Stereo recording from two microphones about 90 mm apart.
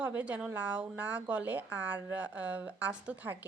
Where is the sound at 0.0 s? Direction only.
15° right (ahead or behind).